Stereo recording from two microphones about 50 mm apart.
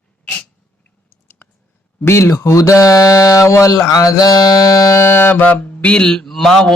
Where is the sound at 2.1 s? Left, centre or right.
Left.